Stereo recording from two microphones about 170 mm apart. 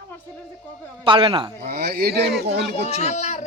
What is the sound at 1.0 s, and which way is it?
Speech, 30° right (ahead or behind).